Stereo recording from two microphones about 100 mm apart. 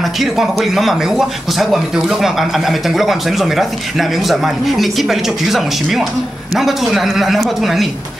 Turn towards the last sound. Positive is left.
turn(degrees=0)  # may be behind; listen again after turning